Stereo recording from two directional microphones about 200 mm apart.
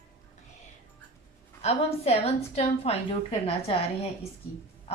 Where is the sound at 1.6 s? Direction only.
30° left (ahead or behind).